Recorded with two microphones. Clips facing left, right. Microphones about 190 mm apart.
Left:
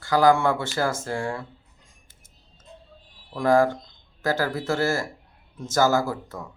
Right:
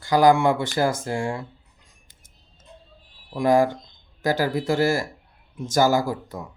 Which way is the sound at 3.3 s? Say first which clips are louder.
Right 1 dB; 15° right (ahead or behind).